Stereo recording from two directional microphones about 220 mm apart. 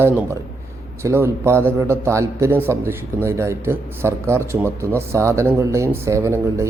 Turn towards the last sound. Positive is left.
turn(degrees=-15)  # may be behind; listen again after turning